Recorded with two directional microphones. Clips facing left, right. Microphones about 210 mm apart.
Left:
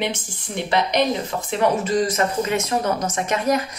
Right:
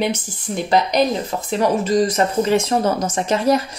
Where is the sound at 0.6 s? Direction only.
40° right (ahead or behind).